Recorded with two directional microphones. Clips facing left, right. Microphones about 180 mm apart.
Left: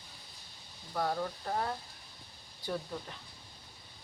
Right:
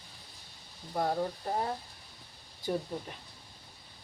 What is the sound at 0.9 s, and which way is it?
Speech, 25° right (ahead or behind).